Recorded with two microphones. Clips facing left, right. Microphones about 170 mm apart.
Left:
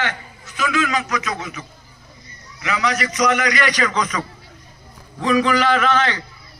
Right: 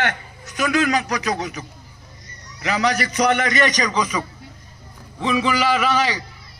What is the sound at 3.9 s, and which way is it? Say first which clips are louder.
A man's voice: right 1 dB; 10° right (ahead or behind).